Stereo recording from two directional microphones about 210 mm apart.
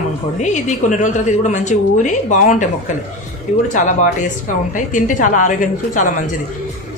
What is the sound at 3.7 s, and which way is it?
A woman's voice, 35° left (ahead or behind).